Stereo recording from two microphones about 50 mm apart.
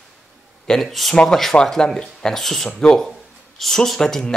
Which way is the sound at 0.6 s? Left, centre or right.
Centre.